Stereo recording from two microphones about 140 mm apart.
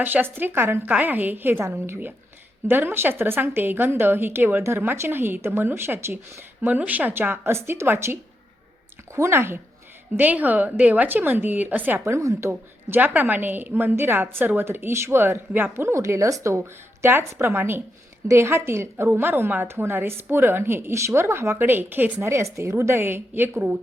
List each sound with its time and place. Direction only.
0.0 s a woman's voice: 15° right (ahead or behind)